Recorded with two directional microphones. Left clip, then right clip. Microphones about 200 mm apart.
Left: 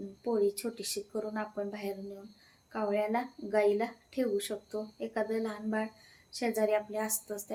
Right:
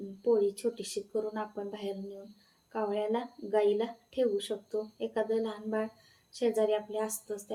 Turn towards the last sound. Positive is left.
turn(degrees=15)  # may be behind; listen again after turning